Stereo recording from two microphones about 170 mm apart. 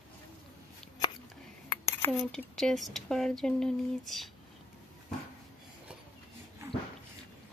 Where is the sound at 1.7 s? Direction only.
15° left (ahead or behind).